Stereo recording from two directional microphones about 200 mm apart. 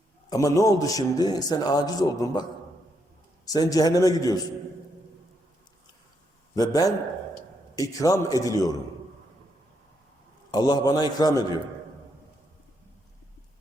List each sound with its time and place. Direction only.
0.3 s a man's voice: 15° left (ahead or behind)
6.5 s a man's voice: 20° left (ahead or behind)
10.5 s a man's voice: 20° left (ahead or behind)